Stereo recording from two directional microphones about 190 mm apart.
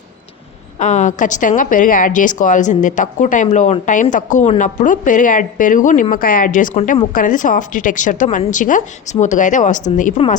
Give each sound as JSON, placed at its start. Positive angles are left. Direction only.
{"t": 0.8, "sound": "a woman's voice", "side_deg": 40}